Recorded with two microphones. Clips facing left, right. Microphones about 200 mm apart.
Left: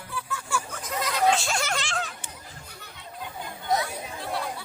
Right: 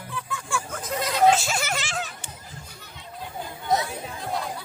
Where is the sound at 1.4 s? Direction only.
5° right (ahead or behind).